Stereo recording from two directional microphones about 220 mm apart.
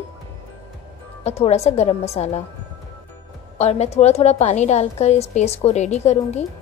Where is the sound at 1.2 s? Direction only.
30° left (ahead or behind).